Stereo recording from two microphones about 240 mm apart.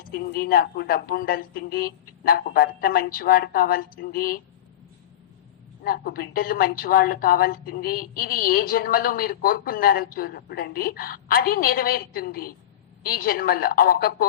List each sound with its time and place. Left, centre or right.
0.0 s a woman's voice: left
5.8 s a woman's voice: left